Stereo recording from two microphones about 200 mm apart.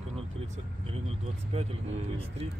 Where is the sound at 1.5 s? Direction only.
30° right (ahead or behind).